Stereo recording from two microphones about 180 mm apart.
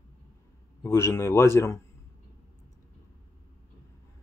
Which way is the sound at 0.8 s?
15° left (ahead or behind).